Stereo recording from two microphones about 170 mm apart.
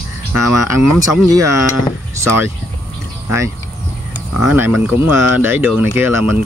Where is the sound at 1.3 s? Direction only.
20° right (ahead or behind).